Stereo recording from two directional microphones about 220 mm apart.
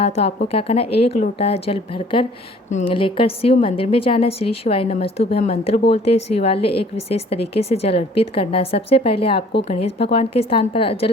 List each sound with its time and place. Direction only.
0.0 s a woman's voice: 25° left (ahead or behind)